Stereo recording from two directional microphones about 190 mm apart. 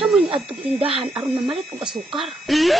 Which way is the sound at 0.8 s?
30° right (ahead or behind).